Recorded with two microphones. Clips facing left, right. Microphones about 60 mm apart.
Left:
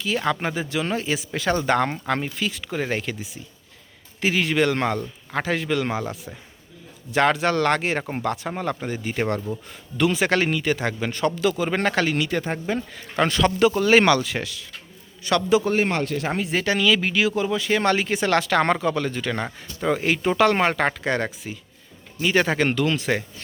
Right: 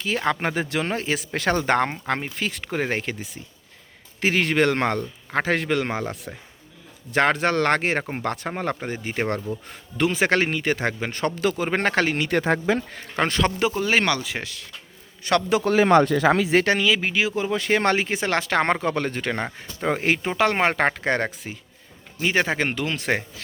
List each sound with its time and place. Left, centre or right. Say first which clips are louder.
0.0 s speech: even; right
0.4 s speech: right 1 dB; right
12.3 s speech: right 4 dB; right
12.9 s speech: left 2 dB; right
13.6 s speech: left 4 dB; right
14.1 s speech: left 5 dB; centre
15.2 s speech: left 1 dB; right
16.3 s speech: right 6 dB; right
16.8 s speech: left 2 dB; right
17.5 s speech: even; right
20.2 s speech: left 4 dB; right
22.2 s speech: left 2 dB; right
23.0 s speech: even; right